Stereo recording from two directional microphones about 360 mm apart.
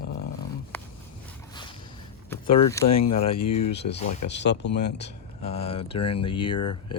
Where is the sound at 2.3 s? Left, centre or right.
Centre.